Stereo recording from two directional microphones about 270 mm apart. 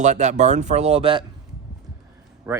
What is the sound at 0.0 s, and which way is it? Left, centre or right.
Speech, right.